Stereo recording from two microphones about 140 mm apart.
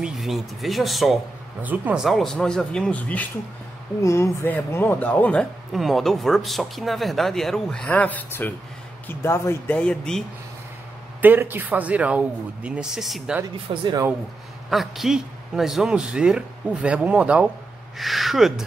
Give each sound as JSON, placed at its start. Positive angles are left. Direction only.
{"t": 0.0, "sound": "speech", "side_deg": 0}
{"t": 1.6, "sound": "a man's voice", "side_deg": -10}
{"t": 2.0, "sound": "speech", "side_deg": 0}
{"t": 4.0, "sound": "speech", "side_deg": 20}
{"t": 11.1, "sound": "a man's voice", "side_deg": -15}
{"t": 13.7, "sound": "speech", "side_deg": -40}
{"t": 14.7, "sound": "a man's voice", "side_deg": 0}